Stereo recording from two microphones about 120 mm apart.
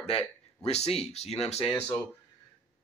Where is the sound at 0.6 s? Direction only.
60° left (ahead or behind).